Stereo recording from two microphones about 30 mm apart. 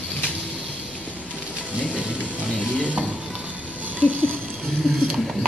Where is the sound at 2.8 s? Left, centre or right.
Right.